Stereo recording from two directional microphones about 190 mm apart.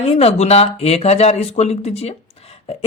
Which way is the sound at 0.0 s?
35° left (ahead or behind).